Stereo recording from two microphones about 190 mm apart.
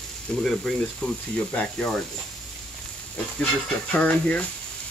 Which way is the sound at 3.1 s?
5° left (ahead or behind).